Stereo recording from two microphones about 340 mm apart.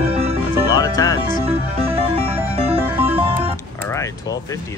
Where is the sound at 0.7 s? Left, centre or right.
Centre.